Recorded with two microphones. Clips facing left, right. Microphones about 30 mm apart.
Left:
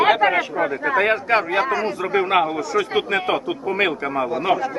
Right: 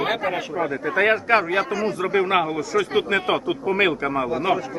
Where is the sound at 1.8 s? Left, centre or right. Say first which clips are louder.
Left 1 dB; centre.